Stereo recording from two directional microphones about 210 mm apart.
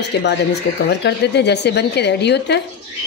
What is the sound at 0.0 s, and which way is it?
Speech, 55° left (ahead or behind).